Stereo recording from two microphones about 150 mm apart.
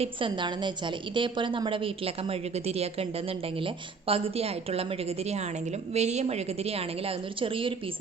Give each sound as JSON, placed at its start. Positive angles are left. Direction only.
{"t": 0.0, "sound": "a woman's voice", "side_deg": -35}
{"t": 5.9, "sound": "a woman's voice", "side_deg": -50}